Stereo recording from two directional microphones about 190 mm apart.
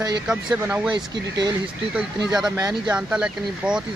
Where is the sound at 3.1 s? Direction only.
5° right (ahead or behind).